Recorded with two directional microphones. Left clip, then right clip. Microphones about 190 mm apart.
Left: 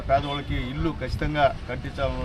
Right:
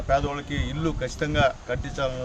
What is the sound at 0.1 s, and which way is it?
Speech, 20° right (ahead or behind).